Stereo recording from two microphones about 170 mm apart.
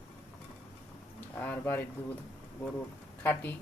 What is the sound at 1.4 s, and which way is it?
Speech, 10° left (ahead or behind).